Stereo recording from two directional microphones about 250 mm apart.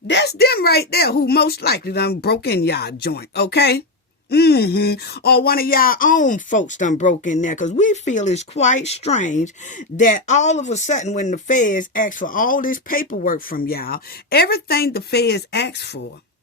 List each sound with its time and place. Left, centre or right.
0.1 s speech: left